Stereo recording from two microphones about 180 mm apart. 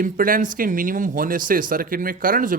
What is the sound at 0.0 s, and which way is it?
Speech, 50° right (ahead or behind).